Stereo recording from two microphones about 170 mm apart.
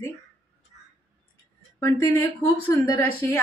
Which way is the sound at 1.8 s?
20° left (ahead or behind).